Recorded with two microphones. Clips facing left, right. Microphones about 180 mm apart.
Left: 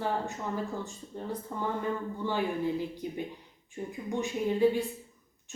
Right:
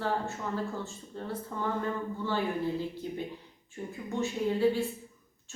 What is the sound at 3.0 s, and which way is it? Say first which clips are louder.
A woman's voice: even; 15° left (ahead or behind).